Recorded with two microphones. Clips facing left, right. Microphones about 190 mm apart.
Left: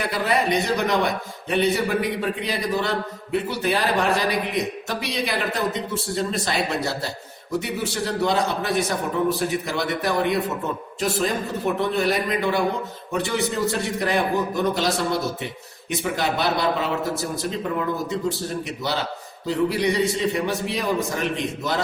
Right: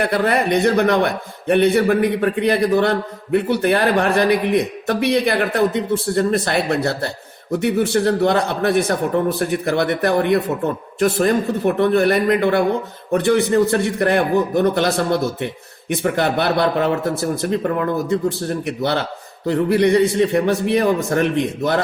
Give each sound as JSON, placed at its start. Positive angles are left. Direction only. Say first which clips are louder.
{"t": 0.0, "sound": "a man's voice", "louder": "right 5 dB", "side_deg": -60}